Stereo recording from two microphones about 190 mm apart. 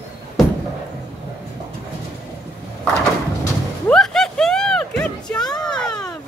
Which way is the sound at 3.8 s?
5° left (ahead or behind).